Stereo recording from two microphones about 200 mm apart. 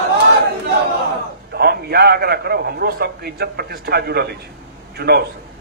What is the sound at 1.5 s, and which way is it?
A man's voice, 50° right (ahead or behind).